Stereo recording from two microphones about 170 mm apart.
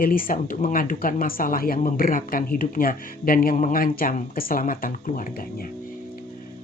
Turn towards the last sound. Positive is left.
turn(degrees=55)  # may be behind; listen again after turning